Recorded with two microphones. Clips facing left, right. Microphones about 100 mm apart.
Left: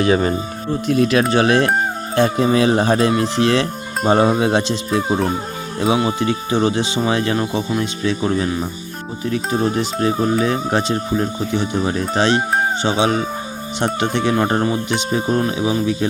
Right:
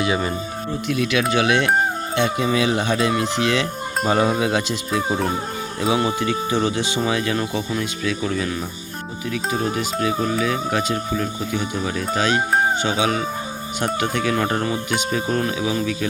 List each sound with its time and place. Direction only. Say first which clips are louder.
0.0 s speech: left 6 dB; 40° left (ahead or behind)
6.1 s speech: left 3 dB; 25° left (ahead or behind)